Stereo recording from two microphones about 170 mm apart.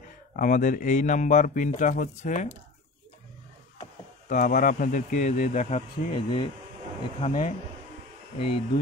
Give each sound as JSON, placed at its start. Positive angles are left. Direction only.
{"t": 0.4, "sound": "speech", "side_deg": 50}
{"t": 4.3, "sound": "speech", "side_deg": 50}